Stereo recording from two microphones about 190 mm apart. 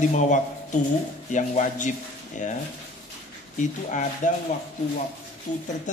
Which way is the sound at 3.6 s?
40° left (ahead or behind).